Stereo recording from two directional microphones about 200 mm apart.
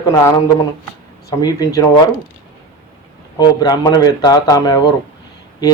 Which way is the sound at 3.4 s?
20° left (ahead or behind).